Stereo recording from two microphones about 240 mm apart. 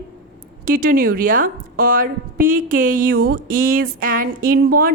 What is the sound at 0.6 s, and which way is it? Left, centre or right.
A woman's voice, right.